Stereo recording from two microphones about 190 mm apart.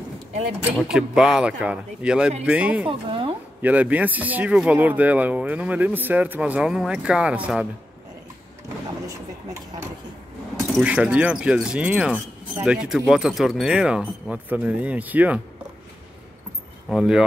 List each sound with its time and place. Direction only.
0.7 s speech: 5° right (ahead or behind)
2.9 s a woman's voice: 25° right (ahead or behind)
3.6 s speech: 10° right (ahead or behind)
10.7 s speech: 5° right (ahead or behind)
16.9 s speech: 5° right (ahead or behind)